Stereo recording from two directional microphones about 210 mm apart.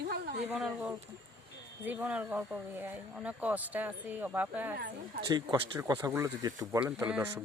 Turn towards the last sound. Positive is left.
turn(degrees=-10)  # may be behind; listen again after turning